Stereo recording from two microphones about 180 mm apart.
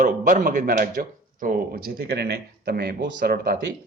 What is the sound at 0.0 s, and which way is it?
A man's voice, 50° right (ahead or behind).